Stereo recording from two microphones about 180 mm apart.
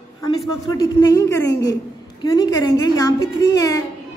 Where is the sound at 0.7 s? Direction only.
20° left (ahead or behind).